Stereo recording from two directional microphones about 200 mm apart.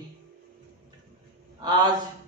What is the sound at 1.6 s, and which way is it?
Speech, 20° right (ahead or behind).